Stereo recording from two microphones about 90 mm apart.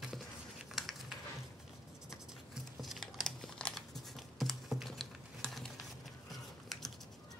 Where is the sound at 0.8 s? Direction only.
5° right (ahead or behind).